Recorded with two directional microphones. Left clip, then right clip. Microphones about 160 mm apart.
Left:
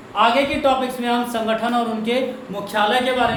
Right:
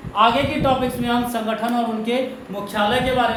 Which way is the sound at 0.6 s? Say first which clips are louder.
Left 1 dB; centre (ahead or behind).